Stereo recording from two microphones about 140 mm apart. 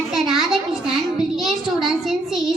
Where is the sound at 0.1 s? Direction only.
Centre (ahead or behind).